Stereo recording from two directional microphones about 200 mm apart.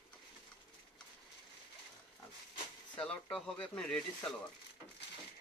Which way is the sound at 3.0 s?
5° left (ahead or behind).